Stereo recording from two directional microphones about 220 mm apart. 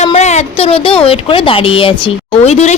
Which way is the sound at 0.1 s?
30° left (ahead or behind).